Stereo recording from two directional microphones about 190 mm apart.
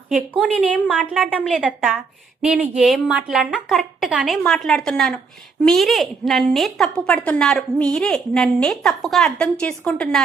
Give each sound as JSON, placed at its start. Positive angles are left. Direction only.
{"t": 0.1, "sound": "a woman's voice", "side_deg": -5}
{"t": 0.5, "sound": "a woman's voice", "side_deg": 5}